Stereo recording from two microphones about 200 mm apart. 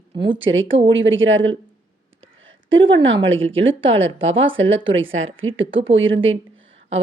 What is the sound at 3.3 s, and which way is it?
Speech, 30° right (ahead or behind).